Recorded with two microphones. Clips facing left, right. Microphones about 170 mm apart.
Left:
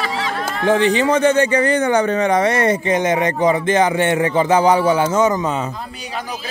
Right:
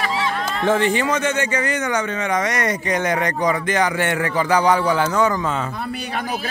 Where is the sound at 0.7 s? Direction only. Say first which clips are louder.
Left 3 dB; 15° left (ahead or behind).